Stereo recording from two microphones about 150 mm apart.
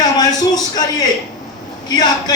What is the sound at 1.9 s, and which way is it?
Speech, 25° left (ahead or behind).